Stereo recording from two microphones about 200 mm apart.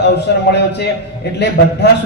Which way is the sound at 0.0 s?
55° left (ahead or behind).